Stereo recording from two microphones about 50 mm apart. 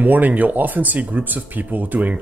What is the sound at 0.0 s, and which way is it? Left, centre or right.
Speech, right.